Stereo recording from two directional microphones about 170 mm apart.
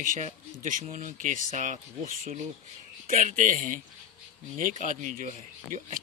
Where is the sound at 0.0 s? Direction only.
50° right (ahead or behind).